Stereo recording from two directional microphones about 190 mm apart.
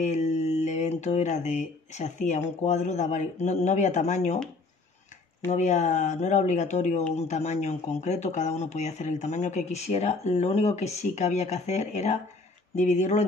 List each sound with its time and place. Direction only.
0.0 s speech: 35° left (ahead or behind)
5.5 s speech: 40° left (ahead or behind)